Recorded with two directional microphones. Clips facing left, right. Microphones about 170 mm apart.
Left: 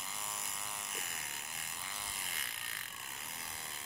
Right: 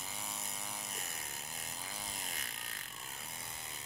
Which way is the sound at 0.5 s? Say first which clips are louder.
Right 1 dB; 30° right (ahead or behind).